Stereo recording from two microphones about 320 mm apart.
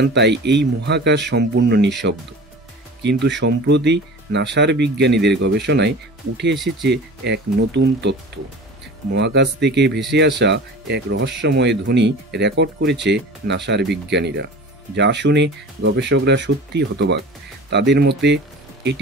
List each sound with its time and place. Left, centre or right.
0.0 s speech: right
6.5 s speech: centre
6.9 s speech: right